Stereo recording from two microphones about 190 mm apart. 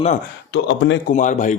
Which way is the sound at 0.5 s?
70° left (ahead or behind).